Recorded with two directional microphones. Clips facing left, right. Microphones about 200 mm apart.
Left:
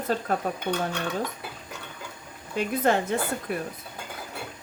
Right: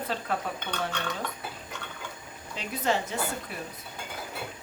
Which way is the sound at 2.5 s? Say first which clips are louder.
Left 5 dB; 55° left (ahead or behind).